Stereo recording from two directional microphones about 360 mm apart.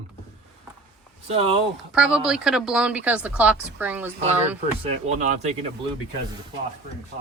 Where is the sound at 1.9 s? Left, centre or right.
Centre.